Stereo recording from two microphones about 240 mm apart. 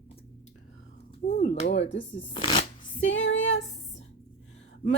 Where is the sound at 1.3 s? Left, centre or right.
Left.